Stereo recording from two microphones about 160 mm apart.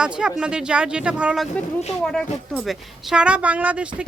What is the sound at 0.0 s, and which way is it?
Speech, 5° right (ahead or behind).